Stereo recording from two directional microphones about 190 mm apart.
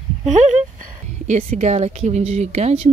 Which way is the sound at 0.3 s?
40° right (ahead or behind).